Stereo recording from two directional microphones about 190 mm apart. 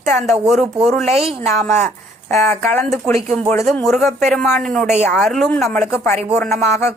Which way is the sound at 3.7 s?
Centre (ahead or behind).